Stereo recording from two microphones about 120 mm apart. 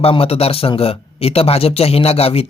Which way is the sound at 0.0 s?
55° left (ahead or behind).